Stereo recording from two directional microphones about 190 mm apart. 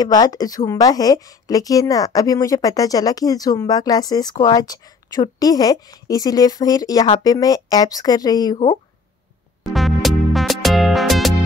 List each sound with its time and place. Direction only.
0.0 s a woman's voice: 20° left (ahead or behind)
9.6 s music: centre (ahead or behind)